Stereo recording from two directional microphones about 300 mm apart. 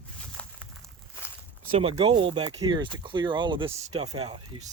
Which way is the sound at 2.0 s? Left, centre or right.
Centre.